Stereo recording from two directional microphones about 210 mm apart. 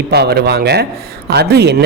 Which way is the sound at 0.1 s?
50° right (ahead or behind).